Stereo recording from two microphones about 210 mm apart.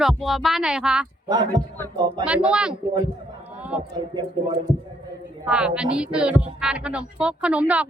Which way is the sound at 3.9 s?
20° right (ahead or behind).